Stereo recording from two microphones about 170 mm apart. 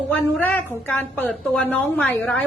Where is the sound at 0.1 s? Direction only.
10° left (ahead or behind).